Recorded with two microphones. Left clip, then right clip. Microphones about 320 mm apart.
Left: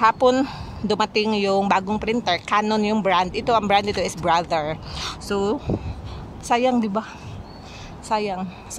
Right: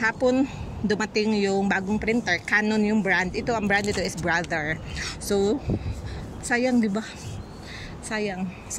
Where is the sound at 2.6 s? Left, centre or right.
Left.